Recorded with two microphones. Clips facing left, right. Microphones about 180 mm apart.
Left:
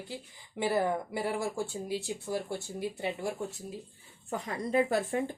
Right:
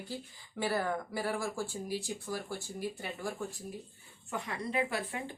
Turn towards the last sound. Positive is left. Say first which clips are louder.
# left 6 dB
turn(degrees=40)  # may be behind; listen again after turning